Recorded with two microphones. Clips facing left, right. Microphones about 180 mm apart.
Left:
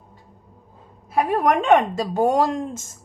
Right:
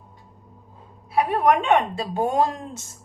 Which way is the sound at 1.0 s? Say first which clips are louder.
Even; 45° left (ahead or behind).